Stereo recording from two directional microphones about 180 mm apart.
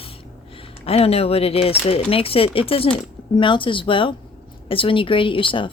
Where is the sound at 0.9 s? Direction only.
35° left (ahead or behind).